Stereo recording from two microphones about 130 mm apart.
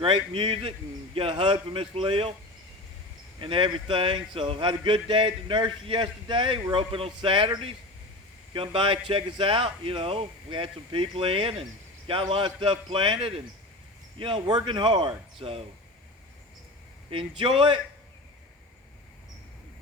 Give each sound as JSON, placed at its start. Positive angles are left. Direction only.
{"t": 0.0, "sound": "speech", "side_deg": -40}
{"t": 3.4, "sound": "speech", "side_deg": -40}
{"t": 17.1, "sound": "speech", "side_deg": -45}